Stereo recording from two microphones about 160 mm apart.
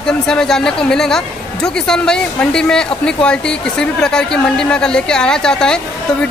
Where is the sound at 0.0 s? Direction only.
5° left (ahead or behind).